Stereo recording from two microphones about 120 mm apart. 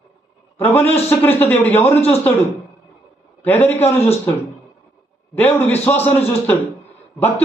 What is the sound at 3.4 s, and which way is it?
Speech, 15° left (ahead or behind).